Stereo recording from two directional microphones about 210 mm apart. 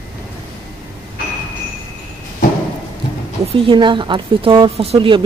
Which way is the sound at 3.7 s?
20° right (ahead or behind).